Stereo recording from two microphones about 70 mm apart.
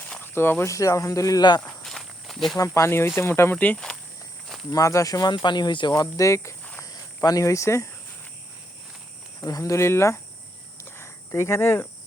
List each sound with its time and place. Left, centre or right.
0.2 s a sound: left
0.6 s speech: left
1.4 s speech: left
1.6 s walk: centre
2.6 s speech: left
3.5 s speech: left
4.7 s speech: left
6.8 s speech: left
9.5 s speech: left
10.8 s cricket: left